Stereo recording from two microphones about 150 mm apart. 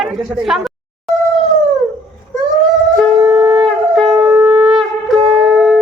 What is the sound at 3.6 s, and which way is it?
Shofar, centre (ahead or behind).